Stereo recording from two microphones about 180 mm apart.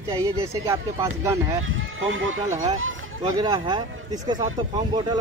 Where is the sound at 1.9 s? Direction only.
90° right.